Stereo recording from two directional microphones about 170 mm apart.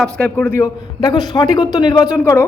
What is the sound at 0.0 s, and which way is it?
A man's voice, 10° left (ahead or behind).